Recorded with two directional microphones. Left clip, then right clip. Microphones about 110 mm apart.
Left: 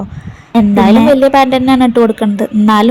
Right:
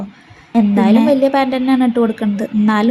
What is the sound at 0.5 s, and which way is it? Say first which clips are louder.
A woman's voice: left 5 dB; 40° left (ahead or behind).